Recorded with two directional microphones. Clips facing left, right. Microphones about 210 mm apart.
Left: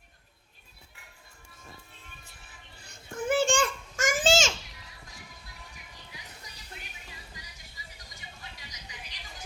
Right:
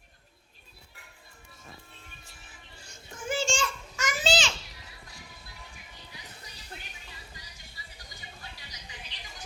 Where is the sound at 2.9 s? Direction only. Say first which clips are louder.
Left 6 dB; 60° left (ahead or behind).